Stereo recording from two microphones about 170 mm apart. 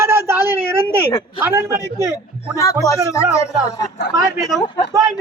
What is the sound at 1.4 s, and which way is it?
Speech, 15° right (ahead or behind).